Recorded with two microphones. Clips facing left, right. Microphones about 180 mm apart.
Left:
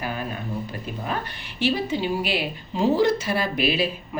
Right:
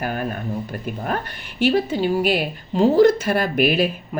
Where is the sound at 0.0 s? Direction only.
50° right (ahead or behind).